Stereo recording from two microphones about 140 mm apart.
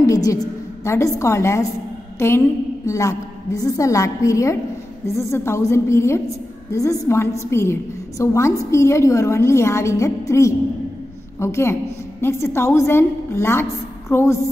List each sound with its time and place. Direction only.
0.0 s a woman's voice: 25° left (ahead or behind)